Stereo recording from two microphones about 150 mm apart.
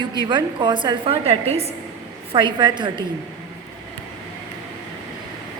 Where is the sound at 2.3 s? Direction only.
30° right (ahead or behind).